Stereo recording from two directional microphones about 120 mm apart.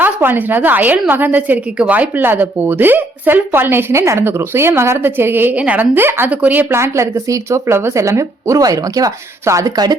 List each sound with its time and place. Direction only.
0.0 s a woman's voice: 15° right (ahead or behind); by 10.0 s 35° right (ahead or behind)